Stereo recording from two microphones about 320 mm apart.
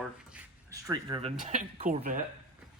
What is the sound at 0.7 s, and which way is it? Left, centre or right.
Speech, centre.